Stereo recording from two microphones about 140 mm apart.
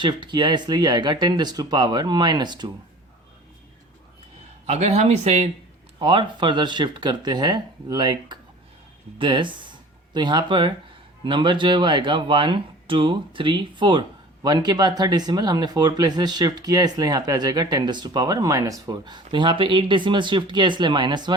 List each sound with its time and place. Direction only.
0.0 s speech: 35° right (ahead or behind)
4.6 s speech: 50° right (ahead or behind)
6.0 s speech: 35° right (ahead or behind)